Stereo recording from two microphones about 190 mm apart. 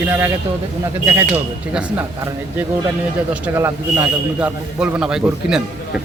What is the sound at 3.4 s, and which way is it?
A man's voice, 15° right (ahead or behind).